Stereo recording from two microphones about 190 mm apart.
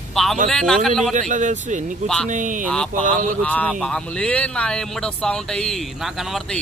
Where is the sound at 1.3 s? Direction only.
40° right (ahead or behind).